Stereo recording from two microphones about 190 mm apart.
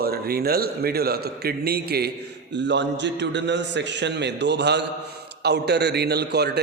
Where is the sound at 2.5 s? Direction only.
65° right (ahead or behind).